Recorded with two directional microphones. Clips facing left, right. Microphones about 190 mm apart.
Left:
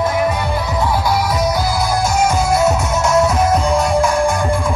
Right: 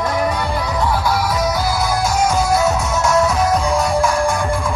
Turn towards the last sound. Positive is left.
turn(degrees=0)  # may be behind; listen again after turning